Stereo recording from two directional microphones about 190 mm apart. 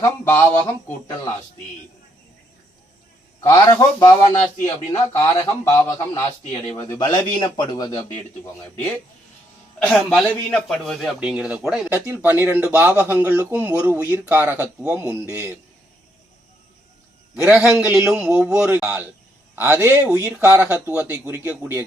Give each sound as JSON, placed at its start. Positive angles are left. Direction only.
{"t": 0.0, "sound": "a man's voice", "side_deg": 15}
{"t": 3.4, "sound": "a man's voice", "side_deg": 15}
{"t": 9.8, "sound": "a man's voice", "side_deg": 5}
{"t": 11.9, "sound": "speech", "side_deg": -15}
{"t": 17.3, "sound": "speech", "side_deg": -10}